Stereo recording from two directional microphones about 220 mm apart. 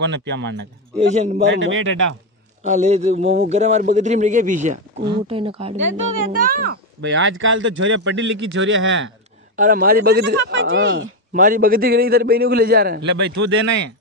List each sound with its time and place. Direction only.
0.0 s a man's voice: 55° right (ahead or behind)
0.9 s a man's voice: 30° right (ahead or behind)
1.5 s speech: 60° right (ahead or behind)
2.6 s a man's voice: 30° right (ahead or behind)
6.3 s speech: 40° right (ahead or behind); by 9.1 s 60° right (ahead or behind)
9.6 s a man's voice: 40° right (ahead or behind); by 10.8 s 60° right (ahead or behind)
11.3 s a man's voice: 40° right (ahead or behind)